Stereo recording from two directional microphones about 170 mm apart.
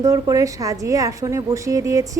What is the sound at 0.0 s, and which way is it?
A woman's voice, 20° right (ahead or behind).